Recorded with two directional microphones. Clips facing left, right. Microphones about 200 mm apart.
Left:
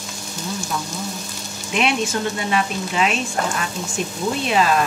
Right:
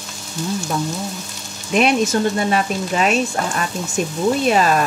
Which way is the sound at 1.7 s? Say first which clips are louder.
Right 5 dB; 45° right (ahead or behind).